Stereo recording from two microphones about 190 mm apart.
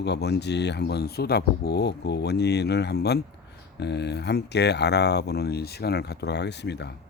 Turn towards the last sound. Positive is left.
turn(degrees=60)  # may be behind; listen again after turning